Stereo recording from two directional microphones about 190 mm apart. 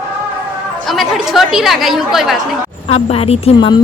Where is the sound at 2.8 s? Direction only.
30° left (ahead or behind).